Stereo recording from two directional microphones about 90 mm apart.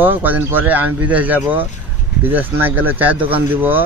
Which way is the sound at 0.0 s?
20° right (ahead or behind).